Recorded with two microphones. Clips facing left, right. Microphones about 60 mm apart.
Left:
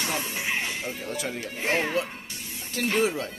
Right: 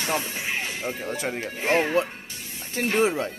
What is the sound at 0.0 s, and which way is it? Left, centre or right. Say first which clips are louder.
Speech: right 2 dB; right.